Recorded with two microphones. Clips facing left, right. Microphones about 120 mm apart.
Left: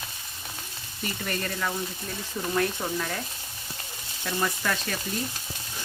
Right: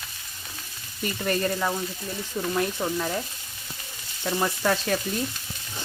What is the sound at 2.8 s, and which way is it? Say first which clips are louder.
Speech: right 3 dB; 5° right (ahead or behind).